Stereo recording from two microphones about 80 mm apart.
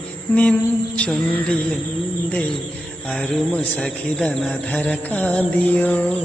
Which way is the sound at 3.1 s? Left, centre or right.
Centre.